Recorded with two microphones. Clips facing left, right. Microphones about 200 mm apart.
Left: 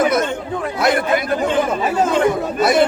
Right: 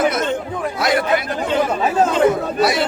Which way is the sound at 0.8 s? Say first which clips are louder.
Left 1 dB; 50° left (ahead or behind).